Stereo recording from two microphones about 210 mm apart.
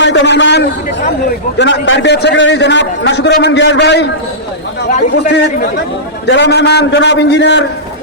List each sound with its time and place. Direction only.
0.0 s a sound: 55° left (ahead or behind)
1.5 s a man's voice: 60° left (ahead or behind)
5.3 s a man's voice: 50° left (ahead or behind)